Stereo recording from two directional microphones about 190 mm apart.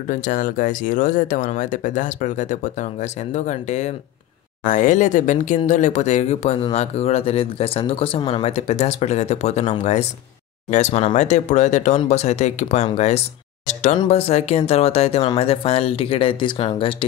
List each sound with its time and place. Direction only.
0.1 s speech: 45° left (ahead or behind)